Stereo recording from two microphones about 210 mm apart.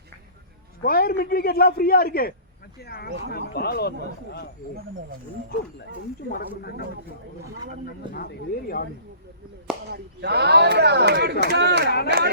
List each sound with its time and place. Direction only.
0.8 s a man's voice: 45° left (ahead or behind)
6.6 s a man's voice: 50° left (ahead or behind)
8.1 s a man's voice: 45° left (ahead or behind)
9.9 s speech: 55° right (ahead or behind)